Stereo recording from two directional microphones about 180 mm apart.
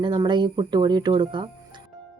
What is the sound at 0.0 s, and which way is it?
Speech, 25° right (ahead or behind).